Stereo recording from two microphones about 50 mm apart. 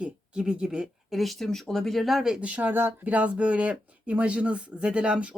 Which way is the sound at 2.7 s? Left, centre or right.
Right.